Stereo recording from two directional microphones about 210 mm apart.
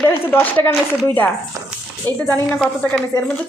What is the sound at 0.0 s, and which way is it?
A woman's voice, 10° left (ahead or behind).